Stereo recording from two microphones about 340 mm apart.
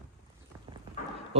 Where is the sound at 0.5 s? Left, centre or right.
Centre.